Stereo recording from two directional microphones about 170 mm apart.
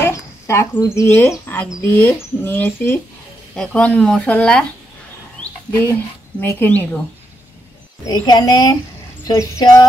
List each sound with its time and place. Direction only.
0.0 s cricket: 15° left (ahead or behind)
0.9 s speech: 15° left (ahead or behind)
8.0 s speech: 25° left (ahead or behind)